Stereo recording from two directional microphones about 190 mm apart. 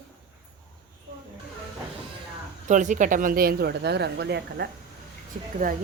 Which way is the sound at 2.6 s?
40° right (ahead or behind).